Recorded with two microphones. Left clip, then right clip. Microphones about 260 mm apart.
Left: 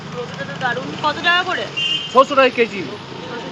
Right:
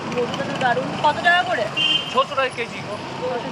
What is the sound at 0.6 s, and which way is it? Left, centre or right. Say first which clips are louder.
Speech: right 1 dB; centre.